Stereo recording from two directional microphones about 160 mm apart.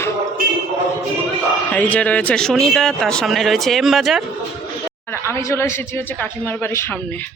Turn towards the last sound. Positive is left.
turn(degrees=15)  # may be behind; listen again after turning